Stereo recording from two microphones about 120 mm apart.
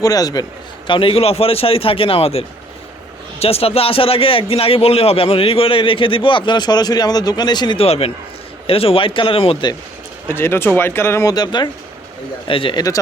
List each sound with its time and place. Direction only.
0.0 s a man's voice: 30° left (ahead or behind)
0.9 s a man's voice: 45° left (ahead or behind)
3.4 s a man's voice: 55° left (ahead or behind); by 7.9 s 40° left (ahead or behind)
7.9 s a man's voice: 55° left (ahead or behind)
10.2 s speech: 20° left (ahead or behind); by 11.7 s 35° left (ahead or behind)
12.5 s a man's voice: 45° left (ahead or behind)